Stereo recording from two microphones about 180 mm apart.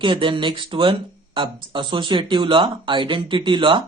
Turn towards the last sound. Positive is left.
turn(degrees=-25)  # may be behind; listen again after turning